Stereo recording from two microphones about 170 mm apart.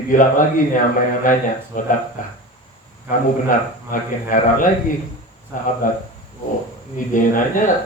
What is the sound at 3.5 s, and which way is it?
Speech, 50° left (ahead or behind).